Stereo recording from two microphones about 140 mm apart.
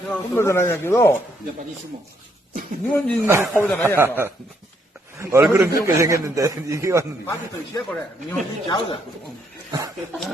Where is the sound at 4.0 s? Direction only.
15° right (ahead or behind).